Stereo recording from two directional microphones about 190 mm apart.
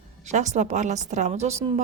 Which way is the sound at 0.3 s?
40° right (ahead or behind).